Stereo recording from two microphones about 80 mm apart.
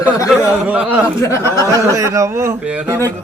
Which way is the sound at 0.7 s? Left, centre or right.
Right.